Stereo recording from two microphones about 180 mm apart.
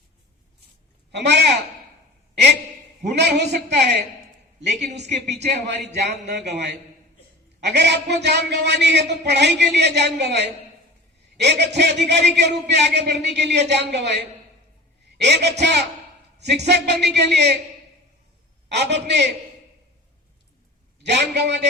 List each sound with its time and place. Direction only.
1.2 s a man's voice: 70° right (ahead or behind)
3.0 s a man's voice: 70° right (ahead or behind)
5.2 s speech: 40° right (ahead or behind)
5.6 s a man's voice: 70° right (ahead or behind)
18.7 s a man's voice: 70° right (ahead or behind)
21.0 s a man's voice: 70° right (ahead or behind)